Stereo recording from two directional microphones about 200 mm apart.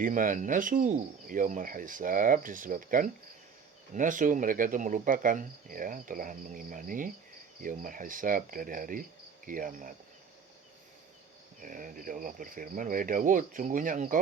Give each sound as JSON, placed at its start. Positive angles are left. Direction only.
{"t": 0.0, "sound": "cricket", "side_deg": -40}
{"t": 11.6, "sound": "cricket", "side_deg": -40}